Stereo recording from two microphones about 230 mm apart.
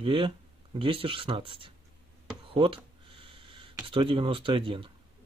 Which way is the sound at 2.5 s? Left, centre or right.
Right.